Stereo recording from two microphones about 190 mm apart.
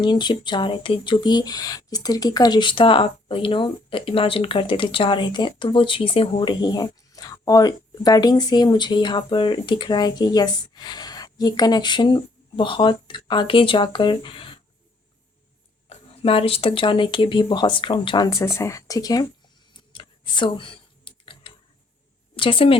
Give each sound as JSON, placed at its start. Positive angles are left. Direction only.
{"t": 0.0, "sound": "speech", "side_deg": 25}
{"t": 15.9, "sound": "speech", "side_deg": 30}
{"t": 19.9, "sound": "a sound", "side_deg": 25}
{"t": 22.4, "sound": "speech", "side_deg": 30}